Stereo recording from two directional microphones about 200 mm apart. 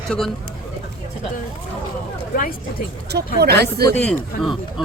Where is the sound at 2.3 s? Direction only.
45° left (ahead or behind).